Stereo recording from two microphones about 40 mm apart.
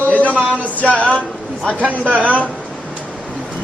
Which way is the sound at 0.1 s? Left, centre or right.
Left.